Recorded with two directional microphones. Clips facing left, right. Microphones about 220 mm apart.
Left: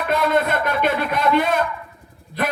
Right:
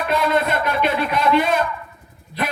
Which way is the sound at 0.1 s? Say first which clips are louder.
Left 1 dB; 50° left (ahead or behind).